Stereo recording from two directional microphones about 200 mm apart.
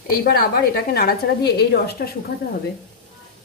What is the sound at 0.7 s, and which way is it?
A woman's voice, 50° left (ahead or behind).